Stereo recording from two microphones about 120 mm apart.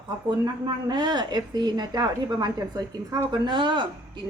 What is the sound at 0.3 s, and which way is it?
A woman's voice, 40° right (ahead or behind).